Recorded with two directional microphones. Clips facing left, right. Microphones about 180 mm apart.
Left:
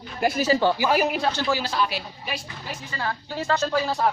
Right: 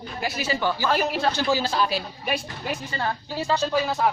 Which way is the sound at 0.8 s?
10° left (ahead or behind).